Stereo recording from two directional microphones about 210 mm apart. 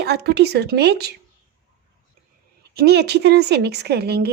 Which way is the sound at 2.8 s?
50° right (ahead or behind).